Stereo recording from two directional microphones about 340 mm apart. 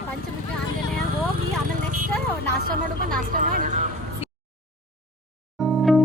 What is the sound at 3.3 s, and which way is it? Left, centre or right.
Speech, right.